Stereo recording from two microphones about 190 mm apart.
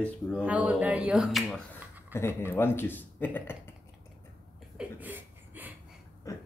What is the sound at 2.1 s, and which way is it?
Speech, 15° left (ahead or behind).